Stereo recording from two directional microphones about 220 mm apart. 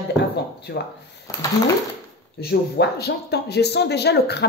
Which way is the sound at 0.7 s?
50° left (ahead or behind).